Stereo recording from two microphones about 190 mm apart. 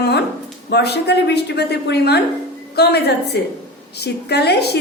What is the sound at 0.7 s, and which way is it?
A woman's voice, 60° left (ahead or behind).